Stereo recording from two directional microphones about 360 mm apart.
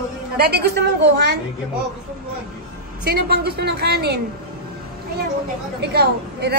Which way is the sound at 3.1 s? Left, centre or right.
Right.